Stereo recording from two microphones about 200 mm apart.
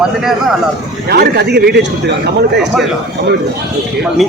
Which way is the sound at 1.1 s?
50° right (ahead or behind).